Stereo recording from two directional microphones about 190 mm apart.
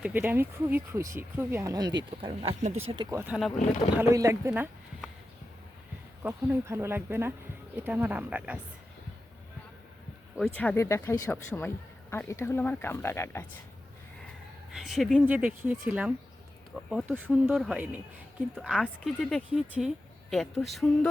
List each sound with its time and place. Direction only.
0.0 s speech: 10° right (ahead or behind)
6.2 s speech: 10° right (ahead or behind)
10.3 s speech: 5° left (ahead or behind)
14.7 s speech: centre (ahead or behind)